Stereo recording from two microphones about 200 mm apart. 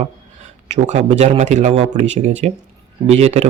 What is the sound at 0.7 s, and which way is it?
Speech, 35° right (ahead or behind).